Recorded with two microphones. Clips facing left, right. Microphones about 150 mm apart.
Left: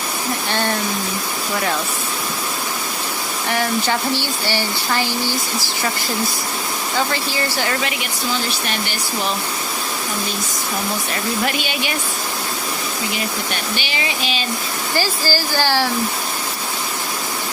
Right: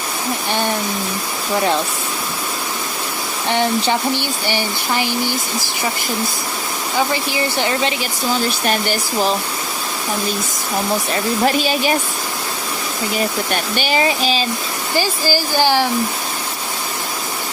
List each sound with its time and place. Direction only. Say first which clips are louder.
3.5 s speech: right 3 dB; 20° right (ahead or behind)
7.1 s speech: right 2 dB; 15° right (ahead or behind)
8.6 s speech: right 6 dB; 45° right (ahead or behind)
11.1 s speech: right 6 dB; 35° right (ahead or behind)
13.5 s speech: right 6 dB; 45° right (ahead or behind)
14.9 s speech: right 3 dB; 15° right (ahead or behind)